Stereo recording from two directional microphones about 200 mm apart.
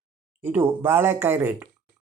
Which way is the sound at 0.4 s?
10° right (ahead or behind).